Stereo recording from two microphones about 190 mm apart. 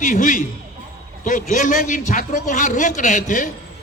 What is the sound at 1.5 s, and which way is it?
A man's voice, 40° left (ahead or behind).